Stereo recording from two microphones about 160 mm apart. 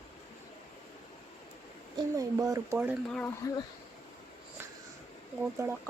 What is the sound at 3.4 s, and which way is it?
Speech, 20° left (ahead or behind).